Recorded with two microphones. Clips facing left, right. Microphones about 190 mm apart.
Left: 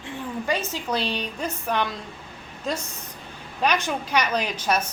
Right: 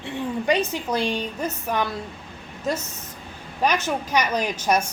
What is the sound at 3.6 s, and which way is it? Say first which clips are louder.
Speech: right 1 dB; 10° right (ahead or behind).